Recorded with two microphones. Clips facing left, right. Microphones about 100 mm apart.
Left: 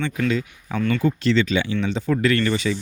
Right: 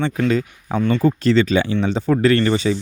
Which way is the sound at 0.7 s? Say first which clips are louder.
Right 4 dB; 25° right (ahead or behind).